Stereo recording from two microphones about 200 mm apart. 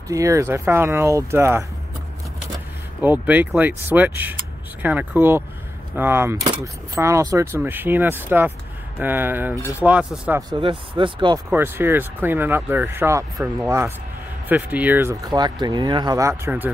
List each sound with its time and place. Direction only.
0.1 s speech: 15° right (ahead or behind)
3.0 s speech: 10° right (ahead or behind)
10.5 s speech: 25° right (ahead or behind)
11.5 s speech: 10° right (ahead or behind)